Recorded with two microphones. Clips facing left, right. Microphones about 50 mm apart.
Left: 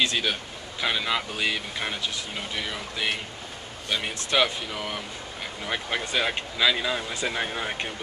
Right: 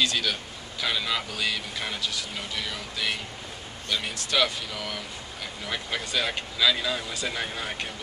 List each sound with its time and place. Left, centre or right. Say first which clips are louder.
0.0 s speech: left 1 dB; left